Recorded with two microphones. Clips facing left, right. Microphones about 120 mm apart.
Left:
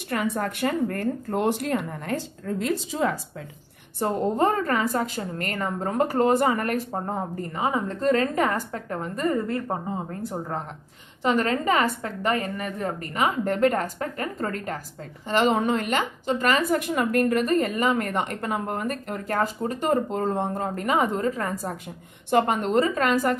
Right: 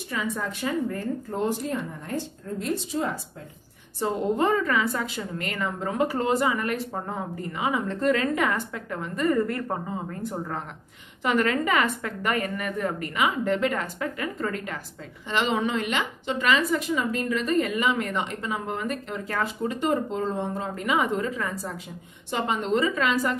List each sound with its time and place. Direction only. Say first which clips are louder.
0.1 s speech: left 4 dB; 60° left (ahead or behind); by 3.2 s 90° left
4.0 s a woman's voice: left 2 dB; 50° left (ahead or behind)
11.2 s a woman's voice: left 1 dB; 35° left (ahead or behind); by 23.3 s 50° left (ahead or behind)